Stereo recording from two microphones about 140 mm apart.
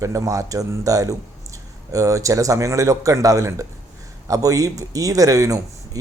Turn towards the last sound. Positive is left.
turn(degrees=-25)  # may be behind; listen again after turning